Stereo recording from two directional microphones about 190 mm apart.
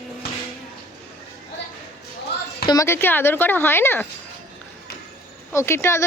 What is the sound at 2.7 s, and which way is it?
Speech, 15° left (ahead or behind).